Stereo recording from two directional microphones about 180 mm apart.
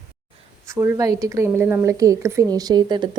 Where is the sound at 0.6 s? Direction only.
15° right (ahead or behind).